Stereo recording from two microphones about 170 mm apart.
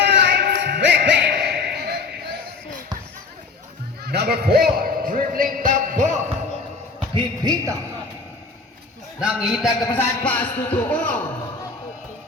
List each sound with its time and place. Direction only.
0.0 s music: 80° right
4.0 s music: 70° right (ahead or behind); by 6.1 s 50° right (ahead or behind)
7.1 s a sound: 25° right (ahead or behind)
9.2 s a man's voice: 5° right (ahead or behind)
10.0 s speech: 10° left (ahead or behind)